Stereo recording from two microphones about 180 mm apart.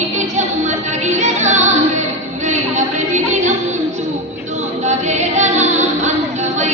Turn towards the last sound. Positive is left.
turn(degrees=-40)  # may be behind; listen again after turning